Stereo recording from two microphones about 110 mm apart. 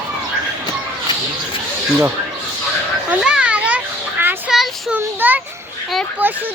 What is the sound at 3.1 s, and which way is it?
Children playing, 10° right (ahead or behind).